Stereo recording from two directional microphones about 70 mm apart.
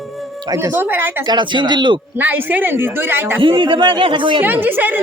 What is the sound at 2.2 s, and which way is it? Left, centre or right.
Speech, right.